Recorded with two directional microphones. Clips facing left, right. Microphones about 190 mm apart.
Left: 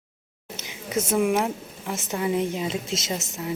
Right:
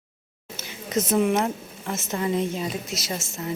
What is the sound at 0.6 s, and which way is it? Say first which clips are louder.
A woman's voice: right 1 dB; 10° left (ahead or behind).